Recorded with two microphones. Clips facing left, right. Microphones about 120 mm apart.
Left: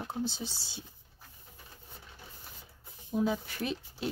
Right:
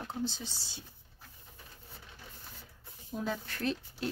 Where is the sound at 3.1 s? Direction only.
10° left (ahead or behind).